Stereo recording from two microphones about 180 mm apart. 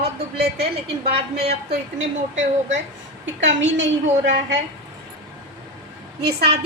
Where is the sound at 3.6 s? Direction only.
90° right.